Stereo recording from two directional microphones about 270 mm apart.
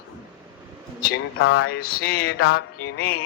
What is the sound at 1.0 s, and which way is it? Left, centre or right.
Music, left.